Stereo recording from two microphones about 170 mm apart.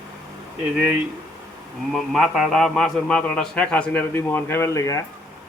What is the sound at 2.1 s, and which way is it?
A man's voice, centre (ahead or behind).